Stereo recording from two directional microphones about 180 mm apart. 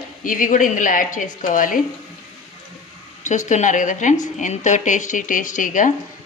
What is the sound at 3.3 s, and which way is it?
Speech, 40° left (ahead or behind).